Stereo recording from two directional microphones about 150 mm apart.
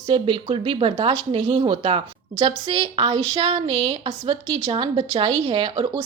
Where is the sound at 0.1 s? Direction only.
35° right (ahead or behind).